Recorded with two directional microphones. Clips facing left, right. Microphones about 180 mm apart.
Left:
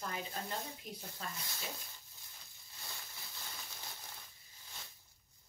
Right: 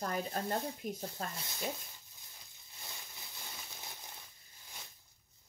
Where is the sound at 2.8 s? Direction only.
20° right (ahead or behind).